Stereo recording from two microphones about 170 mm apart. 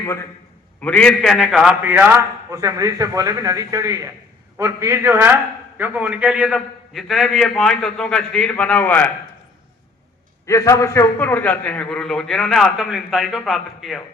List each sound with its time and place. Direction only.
0.0 s a man's voice: 15° left (ahead or behind)
10.4 s a man's voice: 20° left (ahead or behind); by 14.0 s centre (ahead or behind)